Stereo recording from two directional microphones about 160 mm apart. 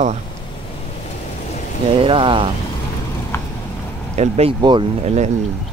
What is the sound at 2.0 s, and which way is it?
Speech, 35° right (ahead or behind).